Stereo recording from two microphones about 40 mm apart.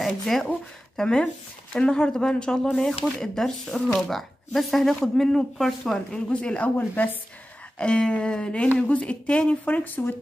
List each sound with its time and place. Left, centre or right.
0.0 s speech: centre
1.0 s speech: left
4.6 s speech: centre; by 8.6 s left
8.8 s speech: left
9.7 s speech: left